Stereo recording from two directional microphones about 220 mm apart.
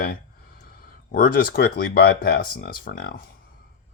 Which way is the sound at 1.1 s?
40° left (ahead or behind).